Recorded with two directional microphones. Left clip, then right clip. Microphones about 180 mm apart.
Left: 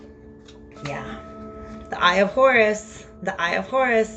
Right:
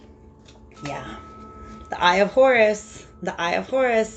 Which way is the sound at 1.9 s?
35° right (ahead or behind).